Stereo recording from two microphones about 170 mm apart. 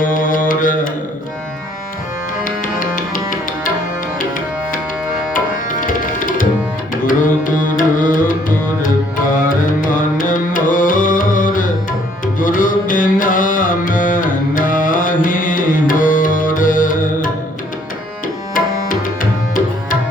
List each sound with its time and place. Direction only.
0.0 s mantra: 50° left (ahead or behind)
2.4 s music: 50° left (ahead or behind)
5.8 s music: 50° left (ahead or behind)
18.5 s tabla: 50° left (ahead or behind)